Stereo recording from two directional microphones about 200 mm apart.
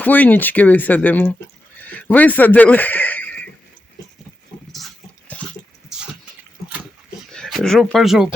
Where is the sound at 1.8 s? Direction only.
10° left (ahead or behind).